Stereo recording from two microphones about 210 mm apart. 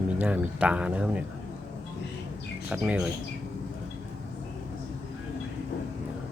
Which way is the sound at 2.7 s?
5° right (ahead or behind).